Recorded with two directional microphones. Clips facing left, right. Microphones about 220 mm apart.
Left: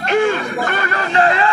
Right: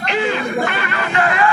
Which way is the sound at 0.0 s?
50° left (ahead or behind).